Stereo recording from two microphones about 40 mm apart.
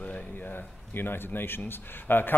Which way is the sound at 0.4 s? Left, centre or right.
Left.